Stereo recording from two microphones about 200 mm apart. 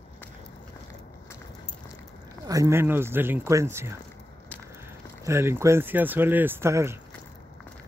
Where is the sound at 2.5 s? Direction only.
15° right (ahead or behind).